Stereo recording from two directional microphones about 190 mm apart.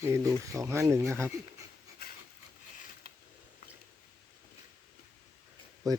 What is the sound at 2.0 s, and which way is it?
Wood, 55° left (ahead or behind).